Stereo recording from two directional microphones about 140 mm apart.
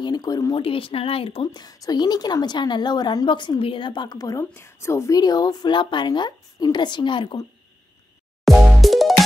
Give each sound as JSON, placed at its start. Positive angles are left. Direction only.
{"t": 0.0, "sound": "speech", "side_deg": 30}
{"t": 0.6, "sound": "speech", "side_deg": 40}
{"t": 8.5, "sound": "music", "side_deg": 0}